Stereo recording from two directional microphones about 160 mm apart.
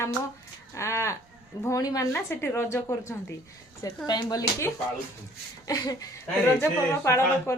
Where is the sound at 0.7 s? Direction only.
15° left (ahead or behind).